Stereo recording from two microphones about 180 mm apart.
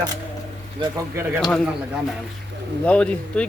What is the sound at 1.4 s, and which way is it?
Speech, centre (ahead or behind).